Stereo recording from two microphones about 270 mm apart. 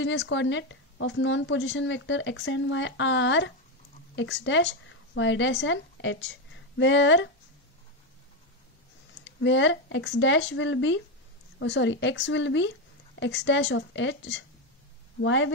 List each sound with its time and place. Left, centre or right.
0.0 s a woman's voice: left
9.4 s a woman's voice: left